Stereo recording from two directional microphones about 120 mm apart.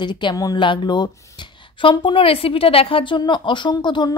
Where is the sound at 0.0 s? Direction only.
40° left (ahead or behind).